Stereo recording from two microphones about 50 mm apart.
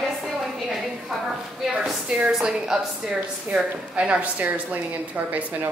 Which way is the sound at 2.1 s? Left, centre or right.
Centre.